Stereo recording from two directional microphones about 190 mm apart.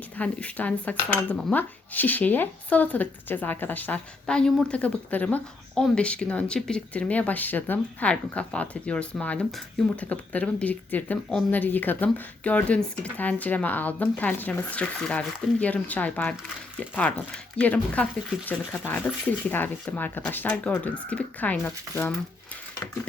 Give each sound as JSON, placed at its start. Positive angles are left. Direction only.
{"t": 0.2, "sound": "speech", "side_deg": 5}